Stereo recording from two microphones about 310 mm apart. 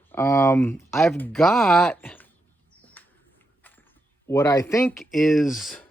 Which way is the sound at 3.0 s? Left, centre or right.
Centre.